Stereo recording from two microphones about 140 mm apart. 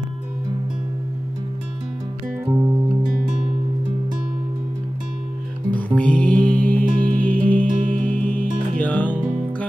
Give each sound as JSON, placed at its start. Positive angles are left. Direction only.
{"t": 2.4, "sound": "music", "side_deg": -25}
{"t": 5.9, "sound": "music", "side_deg": 10}
{"t": 7.6, "sound": "music", "side_deg": -70}
{"t": 8.1, "sound": "music", "side_deg": 10}